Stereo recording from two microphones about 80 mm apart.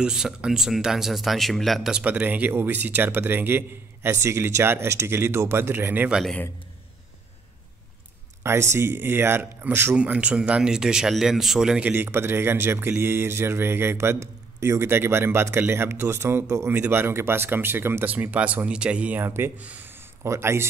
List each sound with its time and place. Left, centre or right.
0.0 s speech: centre
1.9 s speech: centre
8.5 s speech: right
9.9 s speech: centre
11.8 s speech: right
16.7 s speech: right
19.2 s speech: right
19.5 s speech: centre; by 20.6 s right